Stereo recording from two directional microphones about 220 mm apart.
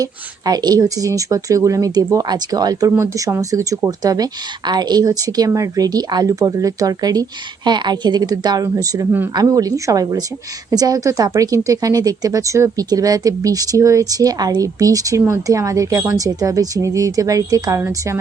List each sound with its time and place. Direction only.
0.0 s speech: 15° right (ahead or behind)